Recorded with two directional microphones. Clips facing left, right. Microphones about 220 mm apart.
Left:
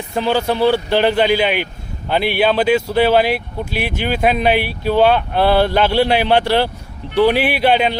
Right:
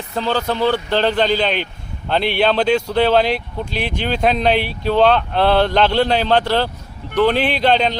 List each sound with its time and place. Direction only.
0.1 s speech: 15° left (ahead or behind)